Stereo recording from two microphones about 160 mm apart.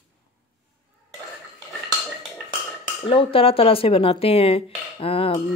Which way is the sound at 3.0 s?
35° left (ahead or behind).